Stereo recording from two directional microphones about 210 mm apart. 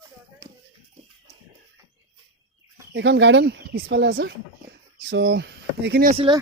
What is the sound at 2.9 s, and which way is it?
Speech, 55° right (ahead or behind).